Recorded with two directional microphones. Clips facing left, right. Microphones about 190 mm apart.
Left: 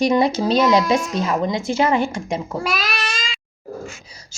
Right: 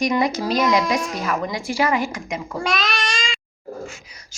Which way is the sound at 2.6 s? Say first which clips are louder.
Even; 5° left (ahead or behind).